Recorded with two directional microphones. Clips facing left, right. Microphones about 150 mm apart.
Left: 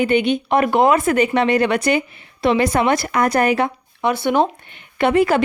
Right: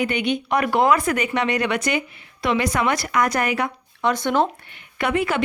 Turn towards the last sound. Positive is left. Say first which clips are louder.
# left 6 dB
turn(degrees=35)  # may be behind; listen again after turning